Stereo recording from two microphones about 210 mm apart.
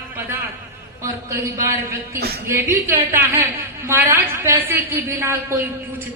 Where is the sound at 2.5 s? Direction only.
10° right (ahead or behind).